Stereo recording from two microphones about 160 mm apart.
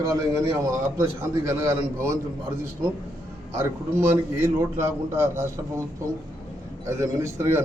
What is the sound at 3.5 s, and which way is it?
Speech, 20° right (ahead or behind).